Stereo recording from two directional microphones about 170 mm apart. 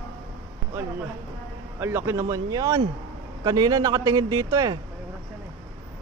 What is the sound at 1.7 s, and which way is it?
Speech, 15° right (ahead or behind).